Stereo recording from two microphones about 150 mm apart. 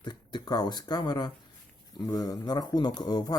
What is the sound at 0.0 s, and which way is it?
Speech, 30° left (ahead or behind).